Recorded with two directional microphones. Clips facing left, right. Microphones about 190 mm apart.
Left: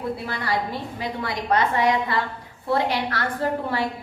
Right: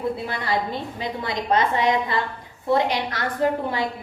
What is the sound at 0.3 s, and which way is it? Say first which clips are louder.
A woman's voice: right 1 dB; 20° right (ahead or behind).